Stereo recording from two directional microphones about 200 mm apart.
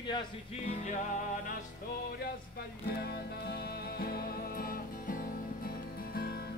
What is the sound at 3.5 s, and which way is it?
Music, 50° left (ahead or behind).